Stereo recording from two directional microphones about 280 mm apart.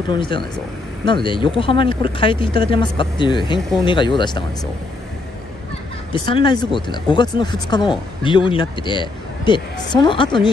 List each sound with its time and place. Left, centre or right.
0.1 s speech: centre
6.1 s speech: centre